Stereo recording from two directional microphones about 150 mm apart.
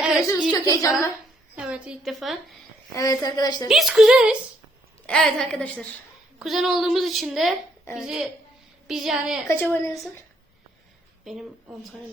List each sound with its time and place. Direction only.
0.5 s a woman's voice: 20° left (ahead or behind)
1.5 s a woman's voice: 5° right (ahead or behind)
2.9 s a woman's voice: 25° left (ahead or behind)
3.7 s a woman's voice: centre (ahead or behind)
9.5 s a woman's voice: 15° left (ahead or behind)
11.3 s a woman's voice: centre (ahead or behind)